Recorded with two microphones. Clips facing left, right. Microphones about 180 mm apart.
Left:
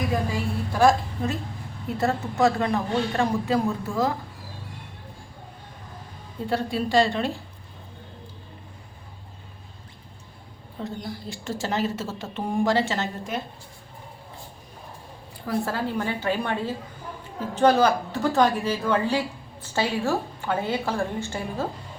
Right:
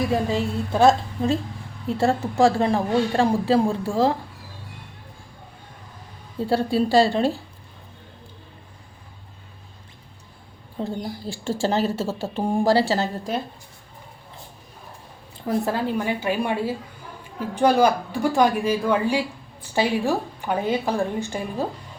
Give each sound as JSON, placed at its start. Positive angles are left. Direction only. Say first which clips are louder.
{"t": 0.1, "sound": "a woman's voice", "louder": "right 4 dB", "side_deg": -25}
{"t": 6.5, "sound": "a woman's voice", "louder": "right 4 dB", "side_deg": -30}
{"t": 10.8, "sound": "a woman's voice", "louder": "right 3 dB", "side_deg": -30}
{"t": 15.4, "sound": "a woman's voice", "louder": "right 3 dB", "side_deg": -20}